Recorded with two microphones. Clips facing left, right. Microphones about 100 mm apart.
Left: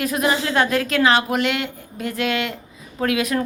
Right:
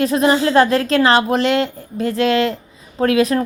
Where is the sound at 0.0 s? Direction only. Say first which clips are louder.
Right 6 dB; 30° right (ahead or behind).